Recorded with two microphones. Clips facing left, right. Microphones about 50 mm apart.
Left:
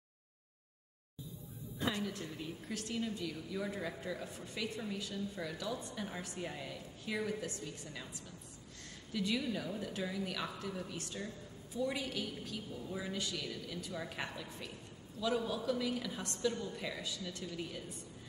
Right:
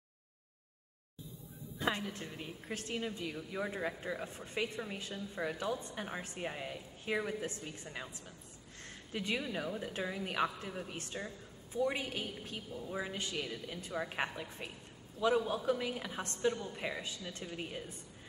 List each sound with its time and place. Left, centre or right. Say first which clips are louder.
1.9 s a woman's voice: right 2 dB; right
8.7 s a sound: left 1 dB; right
9.8 s a woman's voice: right 1 dB; right